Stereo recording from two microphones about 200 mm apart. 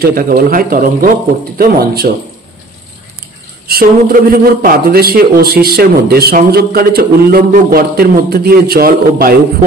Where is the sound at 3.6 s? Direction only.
50° right (ahead or behind).